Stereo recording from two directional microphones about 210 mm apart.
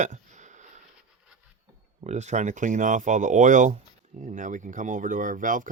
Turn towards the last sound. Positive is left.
turn(degrees=-40)  # may be behind; listen again after turning